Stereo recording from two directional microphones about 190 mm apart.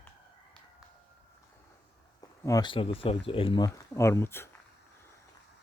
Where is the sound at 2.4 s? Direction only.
20° left (ahead or behind).